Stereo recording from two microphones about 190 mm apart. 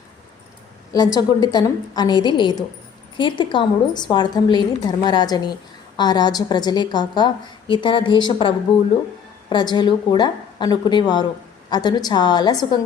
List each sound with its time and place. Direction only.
0.9 s a woman's voice: 20° left (ahead or behind)